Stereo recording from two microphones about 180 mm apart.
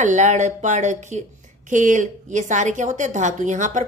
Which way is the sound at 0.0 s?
40° right (ahead or behind).